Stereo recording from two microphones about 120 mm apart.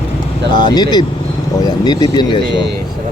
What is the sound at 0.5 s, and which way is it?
Speech, 35° left (ahead or behind).